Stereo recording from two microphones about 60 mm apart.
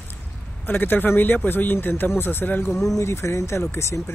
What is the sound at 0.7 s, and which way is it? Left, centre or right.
Speech, left.